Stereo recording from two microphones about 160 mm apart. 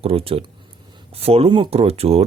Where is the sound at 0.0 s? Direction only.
35° right (ahead or behind).